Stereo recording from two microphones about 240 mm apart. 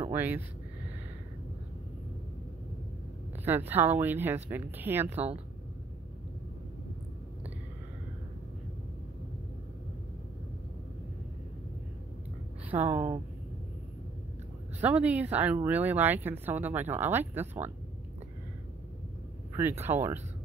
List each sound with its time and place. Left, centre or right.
0.0 s speech: centre
3.4 s speech: centre
5.1 s speech: right
12.8 s speech: right
14.8 s speech: centre
19.8 s speech: centre